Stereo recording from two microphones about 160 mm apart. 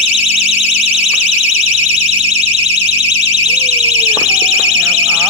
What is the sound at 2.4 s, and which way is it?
Alarm, 40° right (ahead or behind).